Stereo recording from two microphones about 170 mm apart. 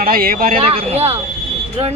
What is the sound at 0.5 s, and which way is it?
Speech, 35° right (ahead or behind).